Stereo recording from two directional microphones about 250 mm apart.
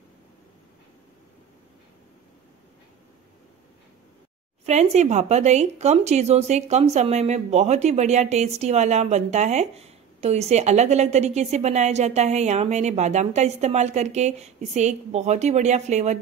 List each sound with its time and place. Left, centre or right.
4.6 s speech: right